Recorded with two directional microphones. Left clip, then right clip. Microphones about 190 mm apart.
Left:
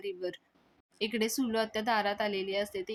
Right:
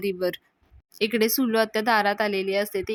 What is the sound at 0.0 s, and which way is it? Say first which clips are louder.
Speech: right 11 dB; 35° right (ahead or behind).